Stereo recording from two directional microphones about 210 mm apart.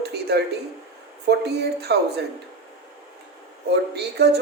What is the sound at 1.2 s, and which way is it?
A man's voice, 50° right (ahead or behind).